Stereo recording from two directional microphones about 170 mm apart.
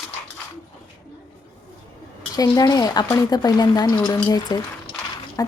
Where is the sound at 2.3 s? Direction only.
20° left (ahead or behind).